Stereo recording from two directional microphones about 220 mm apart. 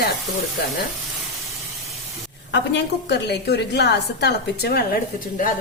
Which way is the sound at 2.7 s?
50° left (ahead or behind).